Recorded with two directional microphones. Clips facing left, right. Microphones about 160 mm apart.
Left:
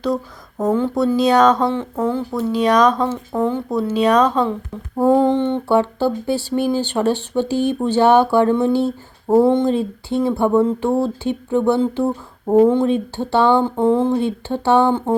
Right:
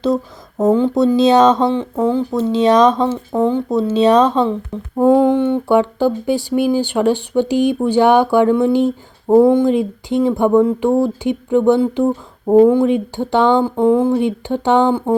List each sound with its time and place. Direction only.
0.6 s speech: 20° right (ahead or behind)
5.0 s speech: 10° right (ahead or behind)
12.0 s a sound: centre (ahead or behind)
12.6 s speech: 10° right (ahead or behind)